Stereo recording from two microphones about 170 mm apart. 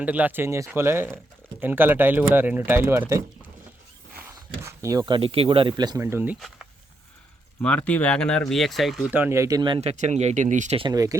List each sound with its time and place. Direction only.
0.0 s speech: 10° right (ahead or behind)
4.4 s speech: 20° right (ahead or behind)
7.6 s speech: 5° left (ahead or behind); by 9.9 s 30° right (ahead or behind)
9.9 s speech: 45° right (ahead or behind)
10.8 s speech: 25° right (ahead or behind)